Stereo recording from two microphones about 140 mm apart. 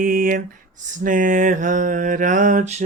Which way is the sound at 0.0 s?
80° right.